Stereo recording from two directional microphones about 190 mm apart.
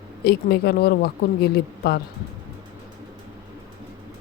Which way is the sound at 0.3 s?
55° left (ahead or behind).